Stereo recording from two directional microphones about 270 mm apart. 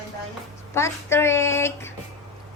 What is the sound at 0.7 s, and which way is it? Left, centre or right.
Speech, centre.